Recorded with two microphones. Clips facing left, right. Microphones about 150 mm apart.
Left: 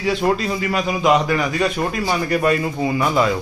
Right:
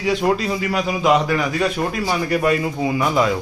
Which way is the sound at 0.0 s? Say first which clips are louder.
Even; 10° right (ahead or behind).